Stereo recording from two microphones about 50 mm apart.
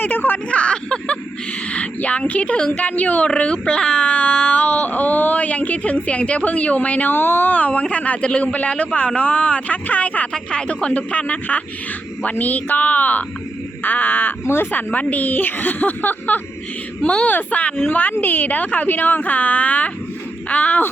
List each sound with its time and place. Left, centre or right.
0.0 s speech: left
0.5 s a sound: left
1.7 s a woman's voice: left
3.2 s speech: centre
7.1 s speech: left
7.5 s speech: left
10.3 s speech: centre; by 16.4 s left
17.0 s speech: left
17.2 s speech: left